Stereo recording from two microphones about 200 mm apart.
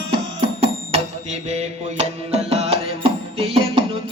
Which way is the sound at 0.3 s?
30° right (ahead or behind).